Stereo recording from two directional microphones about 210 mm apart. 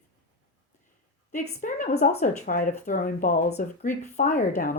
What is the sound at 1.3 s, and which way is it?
Speech, 35° left (ahead or behind).